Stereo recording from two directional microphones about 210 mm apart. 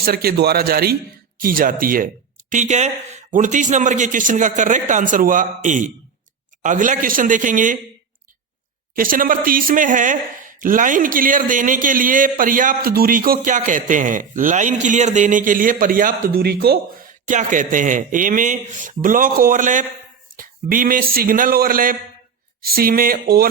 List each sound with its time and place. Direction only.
0.0 s a man's voice: 45° right (ahead or behind)
9.0 s a man's voice: 40° right (ahead or behind)
17.2 s a man's voice: 40° right (ahead or behind)